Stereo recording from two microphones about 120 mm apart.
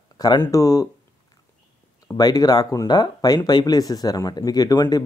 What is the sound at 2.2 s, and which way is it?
Speech, 30° left (ahead or behind).